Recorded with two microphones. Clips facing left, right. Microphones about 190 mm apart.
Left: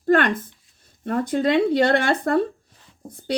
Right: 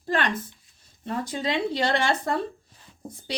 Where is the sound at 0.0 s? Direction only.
55° left (ahead or behind).